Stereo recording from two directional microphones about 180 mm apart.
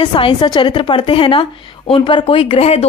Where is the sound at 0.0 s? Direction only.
30° left (ahead or behind).